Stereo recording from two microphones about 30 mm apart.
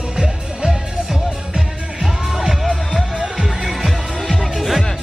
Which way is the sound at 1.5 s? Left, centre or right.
Centre.